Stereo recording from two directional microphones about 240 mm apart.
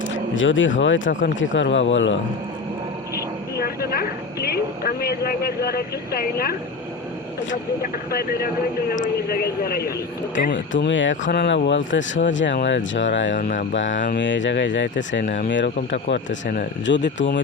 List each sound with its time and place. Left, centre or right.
0.3 s speech: left
3.6 s a woman's voice: left
10.7 s speech: left
13.3 s a woman's voice: left
14.2 s speech: left